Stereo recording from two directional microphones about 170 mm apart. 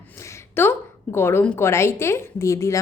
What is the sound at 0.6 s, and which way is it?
A woman's voice, 10° left (ahead or behind).